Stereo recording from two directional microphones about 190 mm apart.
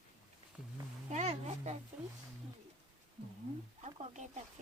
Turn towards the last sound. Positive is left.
turn(degrees=-35)  # may be behind; listen again after turning